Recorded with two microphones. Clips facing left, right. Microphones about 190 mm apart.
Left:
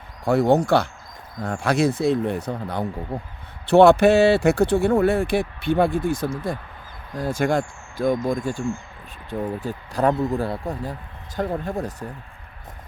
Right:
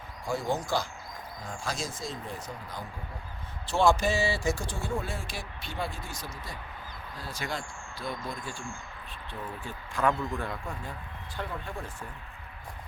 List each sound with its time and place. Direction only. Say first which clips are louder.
0.3 s speech: left 13 dB; 65° left (ahead or behind); by 12.0 s 40° left (ahead or behind)